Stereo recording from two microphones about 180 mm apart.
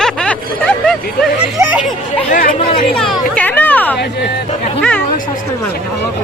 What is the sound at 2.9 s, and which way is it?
Chatter, 5° left (ahead or behind).